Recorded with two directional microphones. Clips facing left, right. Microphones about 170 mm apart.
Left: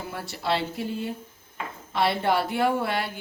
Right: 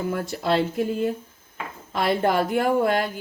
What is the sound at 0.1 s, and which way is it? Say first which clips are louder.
Speech: right 2 dB; 45° right (ahead or behind).